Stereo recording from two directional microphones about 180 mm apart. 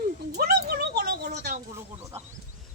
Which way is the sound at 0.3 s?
60° right (ahead or behind).